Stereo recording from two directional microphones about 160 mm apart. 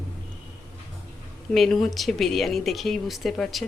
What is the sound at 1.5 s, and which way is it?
Speech, centre (ahead or behind).